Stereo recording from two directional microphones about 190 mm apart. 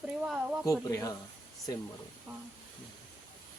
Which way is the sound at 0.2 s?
5° right (ahead or behind).